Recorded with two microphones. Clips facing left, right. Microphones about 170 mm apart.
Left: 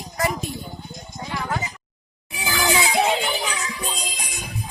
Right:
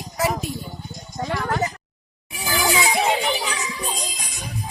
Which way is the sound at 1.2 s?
65° right (ahead or behind).